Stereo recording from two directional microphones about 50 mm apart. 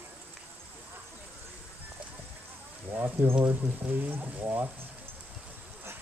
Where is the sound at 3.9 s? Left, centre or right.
Right.